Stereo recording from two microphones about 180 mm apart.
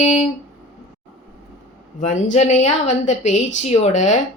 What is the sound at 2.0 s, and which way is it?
A woman's voice, 45° left (ahead or behind).